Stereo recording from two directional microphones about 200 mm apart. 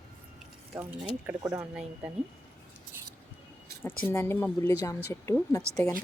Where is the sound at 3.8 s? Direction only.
10° left (ahead or behind).